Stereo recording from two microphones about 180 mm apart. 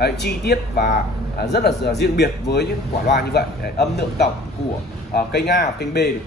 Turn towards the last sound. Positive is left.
turn(degrees=65)  # may be behind; listen again after turning